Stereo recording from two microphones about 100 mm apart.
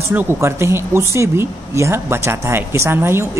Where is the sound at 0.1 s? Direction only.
20° right (ahead or behind).